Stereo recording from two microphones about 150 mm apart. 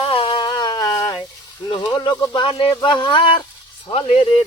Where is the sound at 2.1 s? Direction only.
20° left (ahead or behind).